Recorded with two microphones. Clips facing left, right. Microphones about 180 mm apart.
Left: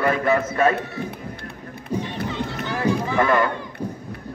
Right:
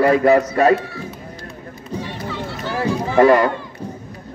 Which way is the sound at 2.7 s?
35° right (ahead or behind).